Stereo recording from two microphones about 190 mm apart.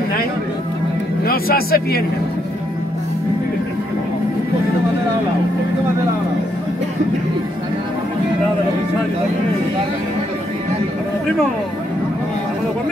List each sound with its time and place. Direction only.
1.2 s speech: 50° left (ahead or behind)